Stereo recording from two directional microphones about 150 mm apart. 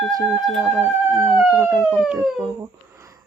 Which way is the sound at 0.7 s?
10° right (ahead or behind).